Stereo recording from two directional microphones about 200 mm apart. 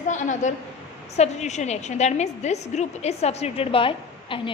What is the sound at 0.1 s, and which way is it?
A woman's voice, 40° left (ahead or behind).